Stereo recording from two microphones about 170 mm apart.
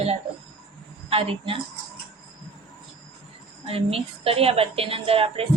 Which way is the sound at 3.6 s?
35° right (ahead or behind).